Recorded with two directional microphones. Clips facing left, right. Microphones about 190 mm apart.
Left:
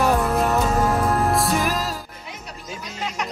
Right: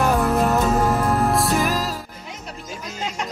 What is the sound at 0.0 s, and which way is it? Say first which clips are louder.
Music: right 1 dB; centre (ahead or behind).